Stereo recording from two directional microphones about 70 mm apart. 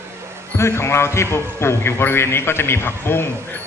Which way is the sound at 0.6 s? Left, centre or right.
Left.